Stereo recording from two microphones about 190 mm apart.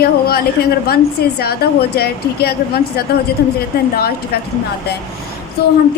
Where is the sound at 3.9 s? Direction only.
55° left (ahead or behind).